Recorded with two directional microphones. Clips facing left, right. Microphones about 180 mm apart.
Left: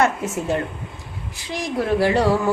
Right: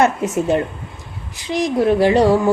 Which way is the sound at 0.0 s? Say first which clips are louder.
Right 4 dB; 20° right (ahead or behind).